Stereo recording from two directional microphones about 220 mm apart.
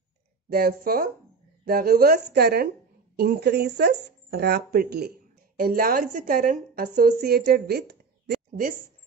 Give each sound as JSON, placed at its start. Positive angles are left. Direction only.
{"t": 0.5, "sound": "a woman's voice", "side_deg": -45}